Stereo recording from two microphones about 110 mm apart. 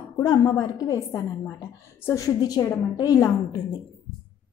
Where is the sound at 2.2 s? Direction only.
35° left (ahead or behind).